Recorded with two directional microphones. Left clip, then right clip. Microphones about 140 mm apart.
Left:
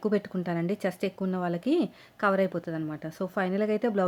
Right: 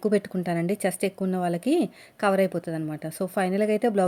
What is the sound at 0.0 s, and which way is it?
Speech, 25° right (ahead or behind).